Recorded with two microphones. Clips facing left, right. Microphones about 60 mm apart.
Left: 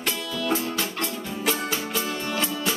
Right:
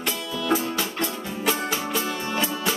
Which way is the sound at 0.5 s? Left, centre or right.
Centre.